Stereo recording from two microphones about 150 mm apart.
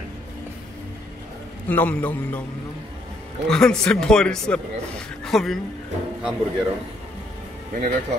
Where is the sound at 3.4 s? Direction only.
5° left (ahead or behind).